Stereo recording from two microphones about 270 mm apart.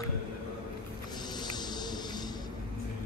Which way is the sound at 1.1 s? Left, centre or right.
Centre.